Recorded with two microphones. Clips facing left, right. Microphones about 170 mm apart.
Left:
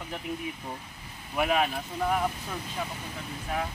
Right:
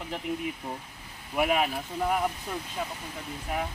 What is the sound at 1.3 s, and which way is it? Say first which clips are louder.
Speech: even; 10° right (ahead or behind).